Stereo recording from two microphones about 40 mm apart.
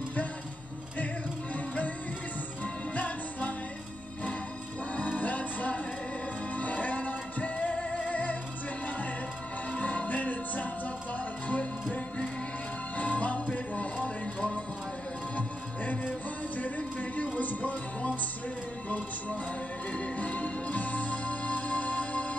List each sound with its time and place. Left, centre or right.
0.9 s music: left
4.9 s music: left
9.7 s music: left
12.9 s music: left
13.5 s a sound: left
15.3 s music: left